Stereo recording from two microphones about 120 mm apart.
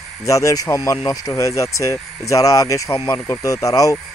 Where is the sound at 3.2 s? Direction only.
25° left (ahead or behind).